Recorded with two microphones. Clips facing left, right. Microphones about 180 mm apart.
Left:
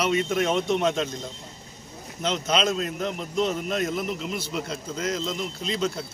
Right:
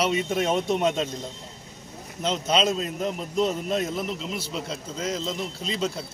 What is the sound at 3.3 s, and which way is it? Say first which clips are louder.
Speech: right 1 dB; 35° right (ahead or behind).